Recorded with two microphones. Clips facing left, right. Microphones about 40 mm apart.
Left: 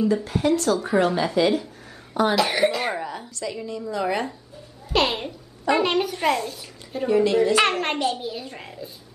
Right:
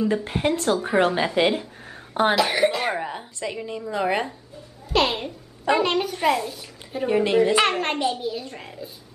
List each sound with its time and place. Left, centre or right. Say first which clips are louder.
0.1 s a woman's voice: left 2 dB; right
2.3 s a child's voice: even; centre
3.0 s a woman's voice: right 1 dB; right
4.8 s a child's voice: even; centre
7.1 s speech: left 2 dB; right
7.5 s a child's voice: even; centre